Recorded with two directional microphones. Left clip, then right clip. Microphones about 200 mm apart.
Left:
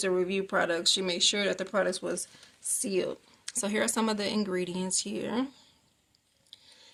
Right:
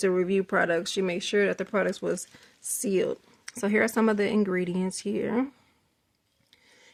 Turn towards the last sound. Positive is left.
turn(degrees=-40)  # may be behind; listen again after turning